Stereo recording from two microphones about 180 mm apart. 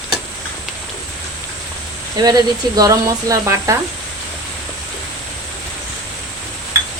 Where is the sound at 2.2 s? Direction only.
20° right (ahead or behind).